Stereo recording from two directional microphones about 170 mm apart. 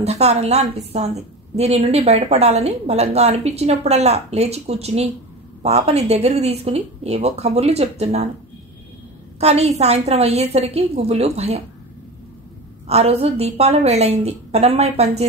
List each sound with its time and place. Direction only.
0.0 s a woman's voice: 40° right (ahead or behind)
9.4 s a woman's voice: 40° right (ahead or behind)
12.8 s a woman's voice: 35° right (ahead or behind)